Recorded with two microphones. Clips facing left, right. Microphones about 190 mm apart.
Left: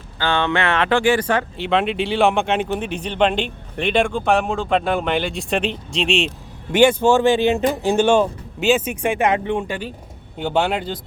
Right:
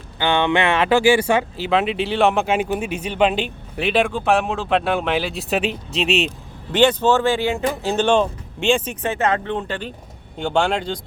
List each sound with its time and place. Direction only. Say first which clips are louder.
0.2 s speech: right 2 dB; 15° right (ahead or behind)
6.7 s speech: left 2 dB; 10° left (ahead or behind)